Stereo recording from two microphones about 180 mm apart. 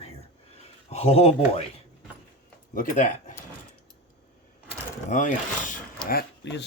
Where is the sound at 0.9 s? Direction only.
35° left (ahead or behind).